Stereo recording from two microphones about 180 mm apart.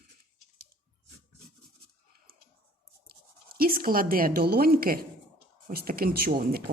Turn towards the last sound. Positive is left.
turn(degrees=-55)  # may be behind; listen again after turning